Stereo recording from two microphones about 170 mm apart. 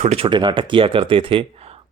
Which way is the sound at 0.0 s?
35° right (ahead or behind).